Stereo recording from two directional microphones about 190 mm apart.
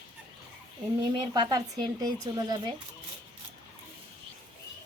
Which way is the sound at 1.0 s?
20° right (ahead or behind).